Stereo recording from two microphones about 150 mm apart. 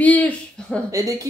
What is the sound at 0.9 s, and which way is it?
Speech, 20° right (ahead or behind).